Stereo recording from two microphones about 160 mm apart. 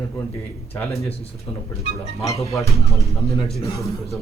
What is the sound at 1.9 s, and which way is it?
Speech, 20° left (ahead or behind).